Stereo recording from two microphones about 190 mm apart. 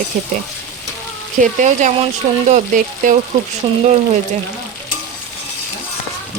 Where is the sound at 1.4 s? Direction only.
40° right (ahead or behind).